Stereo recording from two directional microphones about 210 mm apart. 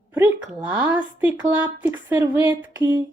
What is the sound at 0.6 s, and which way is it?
A woman's voice, 5° right (ahead or behind).